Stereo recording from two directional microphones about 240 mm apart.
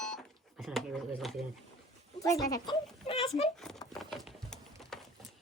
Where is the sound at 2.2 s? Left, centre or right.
Centre.